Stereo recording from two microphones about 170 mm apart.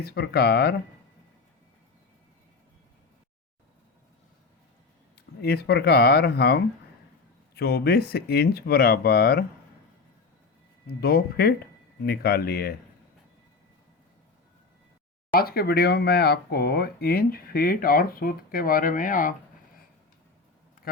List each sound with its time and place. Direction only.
0.0 s speech: 70° left (ahead or behind)
5.4 s speech: 70° left (ahead or behind)
11.0 s speech: 65° left (ahead or behind)
15.3 s speech: 60° left (ahead or behind)